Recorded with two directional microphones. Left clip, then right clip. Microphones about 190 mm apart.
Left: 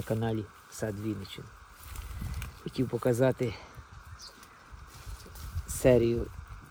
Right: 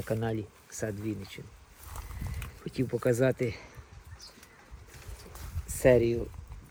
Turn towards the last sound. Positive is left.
turn(degrees=60)  # may be behind; listen again after turning